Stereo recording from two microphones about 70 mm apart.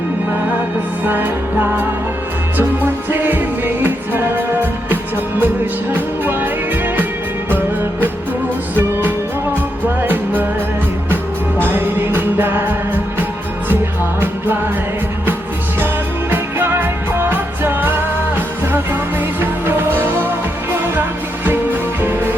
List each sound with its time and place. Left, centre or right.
3.1 s music: right
8.7 s music: right
11.6 s music: right
14.2 s music: right
16.3 s music: right
19.4 s music: right
22.0 s music: right